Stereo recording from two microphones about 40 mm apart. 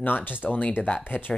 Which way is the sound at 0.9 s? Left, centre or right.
Left.